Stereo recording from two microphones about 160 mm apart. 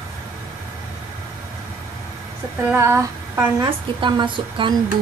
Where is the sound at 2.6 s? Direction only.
15° right (ahead or behind).